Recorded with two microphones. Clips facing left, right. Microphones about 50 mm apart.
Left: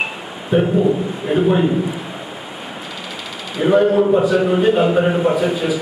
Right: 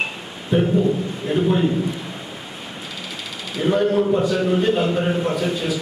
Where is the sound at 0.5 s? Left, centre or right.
Centre.